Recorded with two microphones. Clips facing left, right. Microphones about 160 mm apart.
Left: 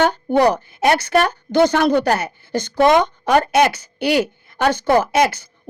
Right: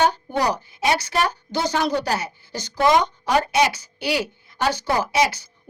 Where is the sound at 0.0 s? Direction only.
60° left (ahead or behind).